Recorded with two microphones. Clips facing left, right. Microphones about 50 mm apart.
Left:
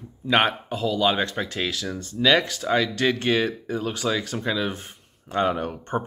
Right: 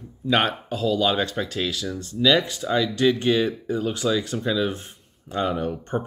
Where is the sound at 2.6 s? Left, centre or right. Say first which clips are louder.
Right 1 dB; centre.